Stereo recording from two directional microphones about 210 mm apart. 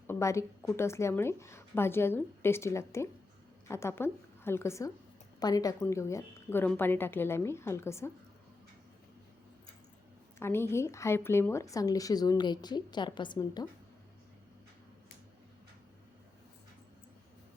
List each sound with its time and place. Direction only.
0.1 s a woman's voice: 15° left (ahead or behind)
10.4 s a woman's voice: 10° left (ahead or behind)